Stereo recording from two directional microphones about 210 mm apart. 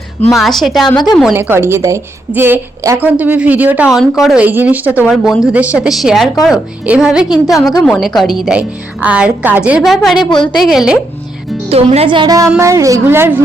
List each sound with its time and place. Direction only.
0.3 s a woman's voice: centre (ahead or behind)
1.3 s a woman's voice: 10° right (ahead or behind)
10.2 s a woman's voice: 20° left (ahead or behind)
10.6 s a woman's voice: centre (ahead or behind)
11.7 s a woman's voice: 30° right (ahead or behind); by 13.4 s 10° right (ahead or behind)